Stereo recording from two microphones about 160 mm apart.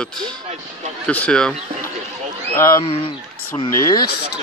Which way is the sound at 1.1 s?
10° left (ahead or behind).